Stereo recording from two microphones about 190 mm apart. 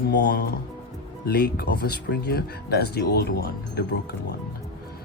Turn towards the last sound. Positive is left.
turn(degrees=55)  # may be behind; listen again after turning